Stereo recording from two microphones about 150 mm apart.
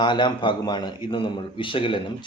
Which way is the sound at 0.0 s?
30° left (ahead or behind).